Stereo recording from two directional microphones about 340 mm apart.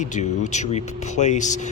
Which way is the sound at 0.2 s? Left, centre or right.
Centre.